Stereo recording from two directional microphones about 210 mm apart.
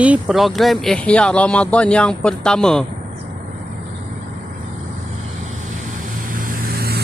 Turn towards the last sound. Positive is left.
turn(degrees=-45)  # may be behind; listen again after turning